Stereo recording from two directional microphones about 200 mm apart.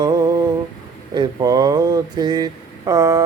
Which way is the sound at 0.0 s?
20° right (ahead or behind).